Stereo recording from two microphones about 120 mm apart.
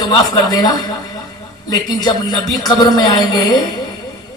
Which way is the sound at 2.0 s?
35° left (ahead or behind).